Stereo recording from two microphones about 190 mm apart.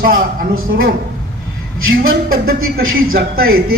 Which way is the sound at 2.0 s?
50° right (ahead or behind).